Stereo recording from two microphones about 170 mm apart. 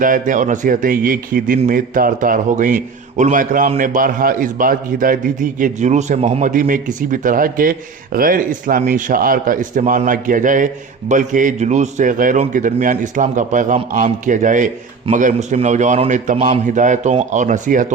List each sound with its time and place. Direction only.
0.0 s a man's voice: 50° right (ahead or behind)